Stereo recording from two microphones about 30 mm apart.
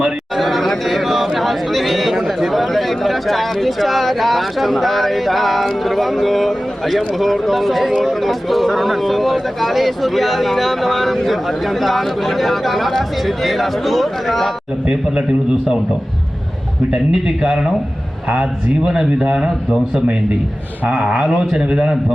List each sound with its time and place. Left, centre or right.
0.3 s speech: centre
17.2 s a man's voice: right
19.4 s a man's voice: centre
20.8 s a man's voice: right